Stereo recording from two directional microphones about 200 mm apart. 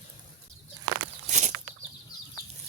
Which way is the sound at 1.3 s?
35° right (ahead or behind).